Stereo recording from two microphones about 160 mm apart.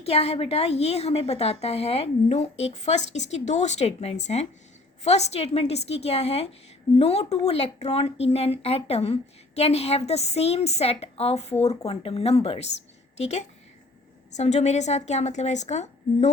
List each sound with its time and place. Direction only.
0.0 s a woman's voice: 40° left (ahead or behind)